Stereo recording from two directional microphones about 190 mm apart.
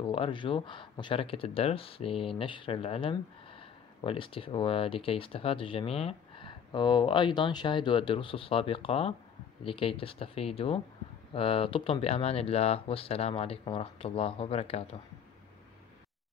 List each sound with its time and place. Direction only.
0.0 s speech: 25° left (ahead or behind)